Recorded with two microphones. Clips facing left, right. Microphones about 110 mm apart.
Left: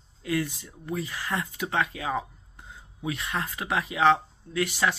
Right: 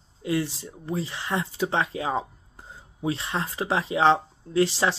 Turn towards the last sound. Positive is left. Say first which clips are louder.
# right 4 dB
turn(degrees=-30)  # may be behind; listen again after turning